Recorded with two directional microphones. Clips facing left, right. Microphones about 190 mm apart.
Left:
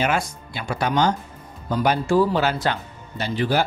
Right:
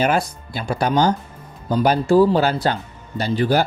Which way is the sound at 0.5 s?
40° right (ahead or behind).